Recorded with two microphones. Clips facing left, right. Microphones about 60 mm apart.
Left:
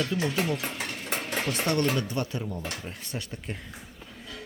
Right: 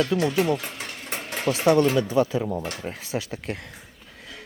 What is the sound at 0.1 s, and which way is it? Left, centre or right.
Speech, right.